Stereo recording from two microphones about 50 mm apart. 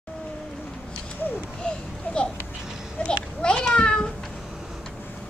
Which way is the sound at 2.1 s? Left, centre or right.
Left.